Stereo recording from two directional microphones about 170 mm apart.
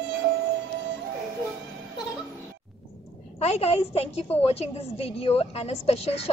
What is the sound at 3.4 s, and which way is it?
A woman's voice, 35° left (ahead or behind).